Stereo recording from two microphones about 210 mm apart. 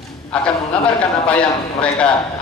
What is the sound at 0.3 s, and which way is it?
A man's voice, 5° left (ahead or behind).